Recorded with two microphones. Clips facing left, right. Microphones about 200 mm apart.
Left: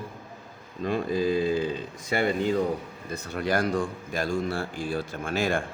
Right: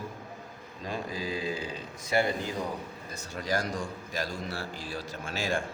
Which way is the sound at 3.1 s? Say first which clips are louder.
Left 5 dB; 60° left (ahead or behind).